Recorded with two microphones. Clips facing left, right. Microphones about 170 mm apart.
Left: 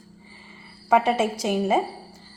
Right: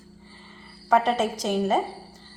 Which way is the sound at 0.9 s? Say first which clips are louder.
Left 1 dB; 10° left (ahead or behind).